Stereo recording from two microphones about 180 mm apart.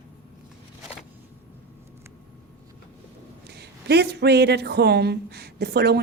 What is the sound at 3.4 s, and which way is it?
A woman's voice, 65° right (ahead or behind).